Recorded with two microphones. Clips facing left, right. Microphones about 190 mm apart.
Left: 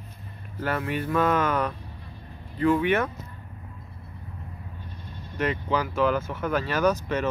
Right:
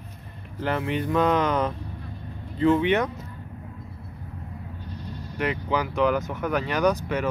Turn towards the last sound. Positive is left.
turn(degrees=-15)  # may be behind; listen again after turning